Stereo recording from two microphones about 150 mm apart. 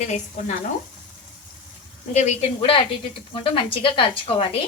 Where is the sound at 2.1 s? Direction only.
45° left (ahead or behind).